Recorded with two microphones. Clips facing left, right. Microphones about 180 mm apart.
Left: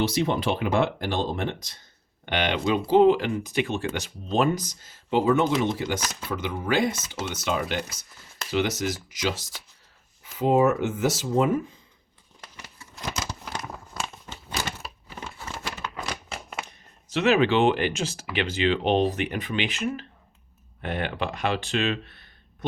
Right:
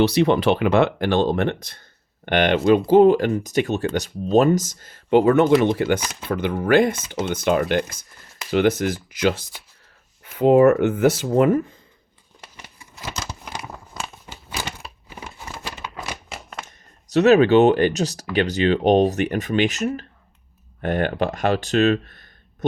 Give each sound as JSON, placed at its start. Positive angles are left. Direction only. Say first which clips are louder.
{"t": 0.0, "sound": "speech", "louder": "right 7 dB", "side_deg": -70}
{"t": 6.0, "sound": "speech", "louder": "right 4 dB", "side_deg": -15}
{"t": 6.3, "sound": "speech", "louder": "right 8 dB", "side_deg": -55}
{"t": 12.8, "sound": "crumpling", "louder": "even", "side_deg": -10}
{"t": 15.1, "sound": "crumpling", "louder": "right 1 dB", "side_deg": -15}
{"t": 16.0, "sound": "a sound", "louder": "right 1 dB", "side_deg": -10}
{"t": 17.2, "sound": "speech", "louder": "right 7 dB", "side_deg": -40}